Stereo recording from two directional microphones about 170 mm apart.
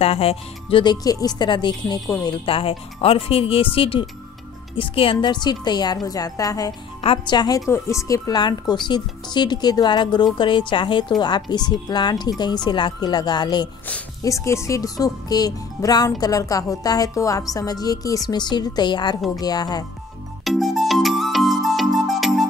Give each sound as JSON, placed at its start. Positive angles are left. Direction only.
{"t": 0.0, "sound": "speech", "side_deg": 35}
{"t": 2.4, "sound": "speech", "side_deg": 30}
{"t": 20.4, "sound": "music", "side_deg": 0}